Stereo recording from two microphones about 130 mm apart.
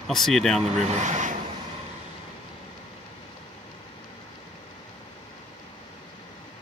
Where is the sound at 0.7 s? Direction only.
60° right (ahead or behind).